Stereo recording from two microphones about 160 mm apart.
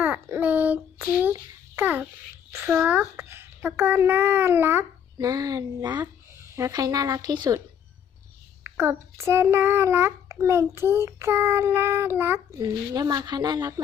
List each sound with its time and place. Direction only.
0.0 s a sound: 10° right (ahead or behind)
2.5 s a child's voice: 15° right (ahead or behind)
8.6 s child singing: 15° right (ahead or behind)